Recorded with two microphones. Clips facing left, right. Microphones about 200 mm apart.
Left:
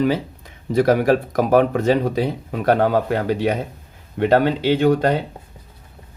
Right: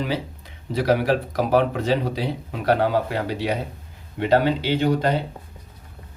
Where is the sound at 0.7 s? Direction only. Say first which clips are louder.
Left 5 dB; 50° left (ahead or behind).